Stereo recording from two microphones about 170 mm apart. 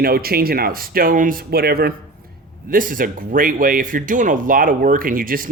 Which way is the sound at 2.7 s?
55° right (ahead or behind).